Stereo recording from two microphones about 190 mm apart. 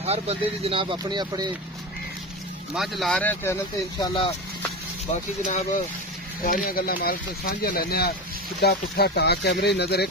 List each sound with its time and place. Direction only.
0.0 s speech: 35° right (ahead or behind)
2.7 s speech: centre (ahead or behind)
4.0 s speech: 25° left (ahead or behind)
5.4 s speech: 40° left (ahead or behind)
6.4 s speech: 50° left (ahead or behind)